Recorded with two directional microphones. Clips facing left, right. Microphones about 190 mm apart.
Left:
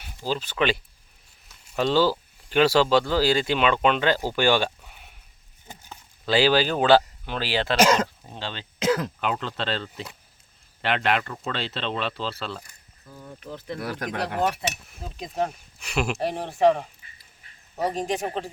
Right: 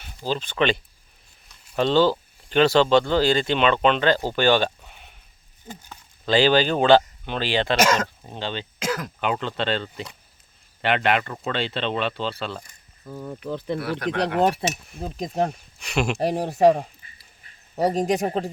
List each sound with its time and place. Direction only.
0.3 s speech: 5° left (ahead or behind)
4.4 s a sound: 10° left (ahead or behind)
5.6 s speech: 10° left (ahead or behind)
7.8 s speech: 30° left (ahead or behind)
8.0 s speech: centre (ahead or behind)
8.8 s speech: 30° left (ahead or behind)
9.2 s speech: centre (ahead or behind)
13.1 s speech: 65° right (ahead or behind)
13.7 s speech: 40° left (ahead or behind)
14.9 s speech: 35° right (ahead or behind)
15.8 s speech: 5° left (ahead or behind)
16.1 s speech: 40° right (ahead or behind)